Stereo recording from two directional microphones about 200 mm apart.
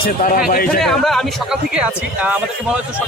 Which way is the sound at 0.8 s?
Centre (ahead or behind).